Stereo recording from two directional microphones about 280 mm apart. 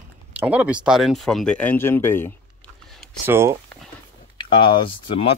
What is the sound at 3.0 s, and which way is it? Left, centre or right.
Speech, centre.